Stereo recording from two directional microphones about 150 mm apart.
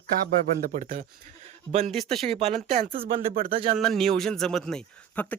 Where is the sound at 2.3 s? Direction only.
45° right (ahead or behind).